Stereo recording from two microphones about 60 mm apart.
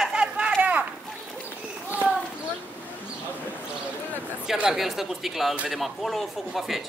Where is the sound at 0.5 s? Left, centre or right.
Right.